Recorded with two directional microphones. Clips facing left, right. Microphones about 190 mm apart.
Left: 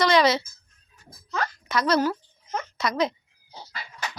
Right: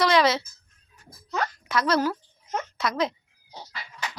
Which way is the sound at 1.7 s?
5° right (ahead or behind).